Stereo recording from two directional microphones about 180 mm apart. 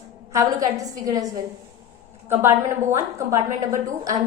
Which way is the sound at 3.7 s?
20° right (ahead or behind).